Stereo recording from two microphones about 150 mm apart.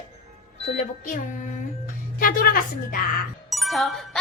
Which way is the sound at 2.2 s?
75° left (ahead or behind).